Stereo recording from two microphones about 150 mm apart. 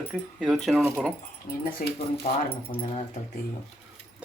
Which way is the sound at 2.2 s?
45° left (ahead or behind).